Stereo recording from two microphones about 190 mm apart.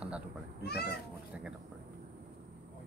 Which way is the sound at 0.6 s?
60° left (ahead or behind).